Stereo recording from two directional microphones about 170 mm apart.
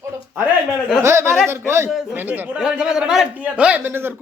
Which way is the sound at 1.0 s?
15° right (ahead or behind).